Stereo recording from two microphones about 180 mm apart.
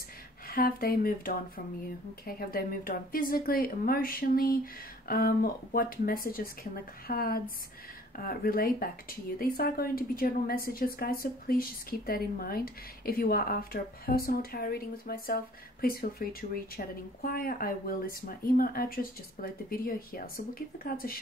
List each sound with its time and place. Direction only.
0.5 s a woman's voice: 55° left (ahead or behind)